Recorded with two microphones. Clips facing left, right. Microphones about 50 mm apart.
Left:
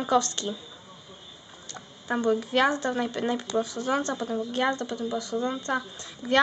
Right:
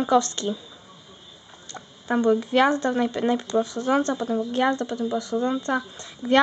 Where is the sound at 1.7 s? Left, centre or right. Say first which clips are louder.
Right 4 dB; right.